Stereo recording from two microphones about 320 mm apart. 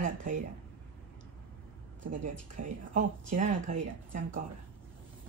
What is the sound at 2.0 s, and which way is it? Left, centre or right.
A woman's voice, right.